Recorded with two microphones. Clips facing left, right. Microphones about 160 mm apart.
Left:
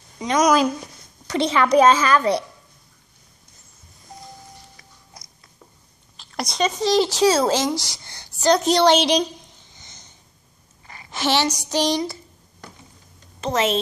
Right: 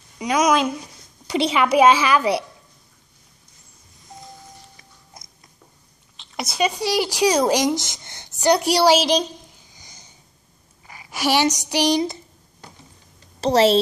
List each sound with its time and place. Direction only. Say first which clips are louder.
0.2 s a woman's voice: left 1 dB; 5° right (ahead or behind)
5.2 s a sound: right 1 dB; 25° right (ahead or behind)
6.1 s speech: even; 5° right (ahead or behind)
10.9 s a sound: right 1 dB; 10° right (ahead or behind)
11.7 s a woman's voice: right 1 dB; 15° right (ahead or behind)
13.4 s a woman's voice: right 6 dB; 35° right (ahead or behind)